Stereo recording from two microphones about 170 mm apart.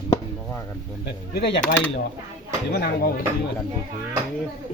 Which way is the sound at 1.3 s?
70° left (ahead or behind).